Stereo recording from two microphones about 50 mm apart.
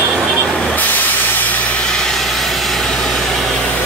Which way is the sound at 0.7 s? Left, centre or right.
Left.